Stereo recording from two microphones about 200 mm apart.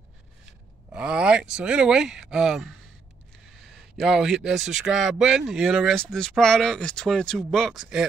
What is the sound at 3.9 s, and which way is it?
Speech, centre (ahead or behind).